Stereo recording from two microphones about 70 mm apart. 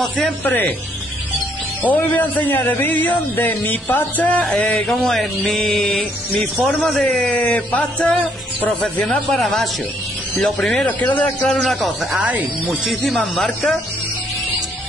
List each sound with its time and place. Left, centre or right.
0.4 s a man's voice: left
1.8 s a man's voice: left
4.8 s a man's voice: centre; by 9.0 s left
9.0 s a man's voice: centre
10.9 s a man's voice: left
11.4 s speech: centre
12.2 s speech: right
12.8 s speech: centre